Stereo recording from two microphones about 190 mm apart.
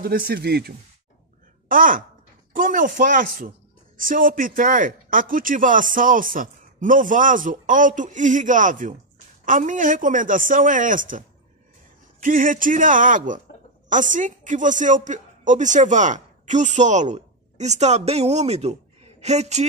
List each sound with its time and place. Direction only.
0.0 s a woman's voice: 55° right (ahead or behind); by 19.6 s 35° right (ahead or behind)